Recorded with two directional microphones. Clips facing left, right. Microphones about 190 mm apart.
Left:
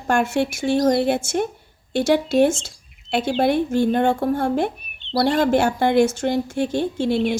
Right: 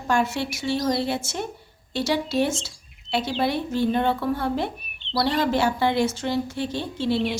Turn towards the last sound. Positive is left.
turn(degrees=50)  # may be behind; listen again after turning